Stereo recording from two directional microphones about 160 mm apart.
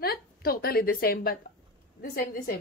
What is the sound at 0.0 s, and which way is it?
A woman's voice, 70° left (ahead or behind).